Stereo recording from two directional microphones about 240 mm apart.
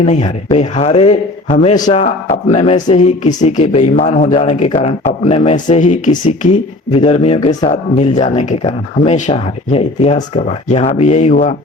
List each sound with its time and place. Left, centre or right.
0.0 s speech: left